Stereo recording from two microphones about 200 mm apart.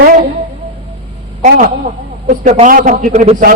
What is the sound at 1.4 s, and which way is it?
A woman's voice, 40° right (ahead or behind).